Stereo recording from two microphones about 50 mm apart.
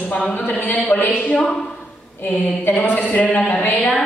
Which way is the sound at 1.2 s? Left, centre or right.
Left.